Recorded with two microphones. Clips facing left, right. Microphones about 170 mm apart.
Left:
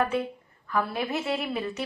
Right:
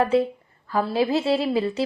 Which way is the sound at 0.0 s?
30° right (ahead or behind).